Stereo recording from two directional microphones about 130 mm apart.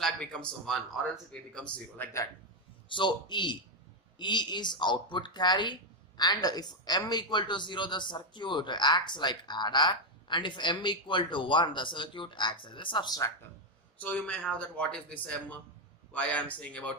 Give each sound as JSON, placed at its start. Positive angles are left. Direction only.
{"t": 0.0, "sound": "speech", "side_deg": 10}
{"t": 2.9, "sound": "speech", "side_deg": 35}
{"t": 13.9, "sound": "speech", "side_deg": 10}